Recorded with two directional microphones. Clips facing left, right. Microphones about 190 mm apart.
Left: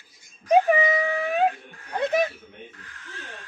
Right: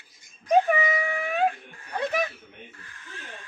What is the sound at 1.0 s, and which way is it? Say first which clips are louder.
Speech: left 4 dB; 15° right (ahead or behind).